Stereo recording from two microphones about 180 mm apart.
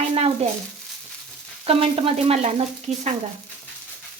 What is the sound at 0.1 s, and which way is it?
Sizzle, 30° right (ahead or behind).